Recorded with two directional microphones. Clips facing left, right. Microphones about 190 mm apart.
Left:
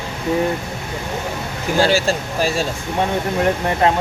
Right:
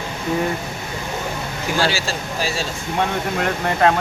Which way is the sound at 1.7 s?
50° left (ahead or behind).